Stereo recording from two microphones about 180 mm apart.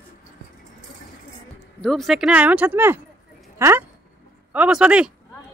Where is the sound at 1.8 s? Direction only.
Centre (ahead or behind).